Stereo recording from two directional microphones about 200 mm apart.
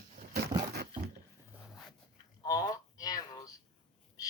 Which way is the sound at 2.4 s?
20° left (ahead or behind).